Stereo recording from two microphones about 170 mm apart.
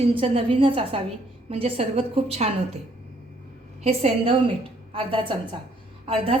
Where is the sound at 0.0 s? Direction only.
35° right (ahead or behind).